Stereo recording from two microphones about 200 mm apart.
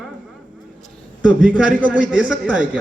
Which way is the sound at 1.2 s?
5° right (ahead or behind).